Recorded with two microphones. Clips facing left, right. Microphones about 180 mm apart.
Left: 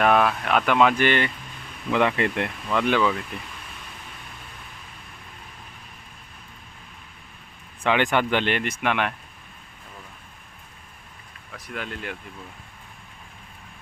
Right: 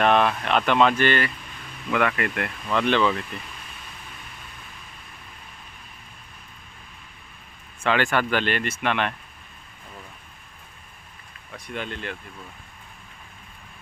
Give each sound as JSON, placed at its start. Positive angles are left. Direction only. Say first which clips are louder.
{"t": 0.0, "sound": "speech", "louder": "even", "side_deg": 5}
{"t": 2.7, "sound": "speech", "louder": "even", "side_deg": 10}
{"t": 7.9, "sound": "speech", "louder": "left 1 dB", "side_deg": 20}
{"t": 11.5, "sound": "speech", "louder": "right 1 dB", "side_deg": 0}